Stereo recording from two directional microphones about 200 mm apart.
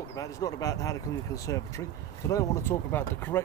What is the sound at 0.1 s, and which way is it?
Speech, 15° left (ahead or behind).